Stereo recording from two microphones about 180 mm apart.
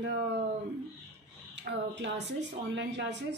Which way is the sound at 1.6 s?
75° right (ahead or behind).